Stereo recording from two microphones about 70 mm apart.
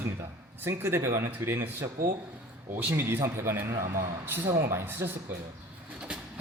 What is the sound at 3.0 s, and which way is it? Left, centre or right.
Speech, right.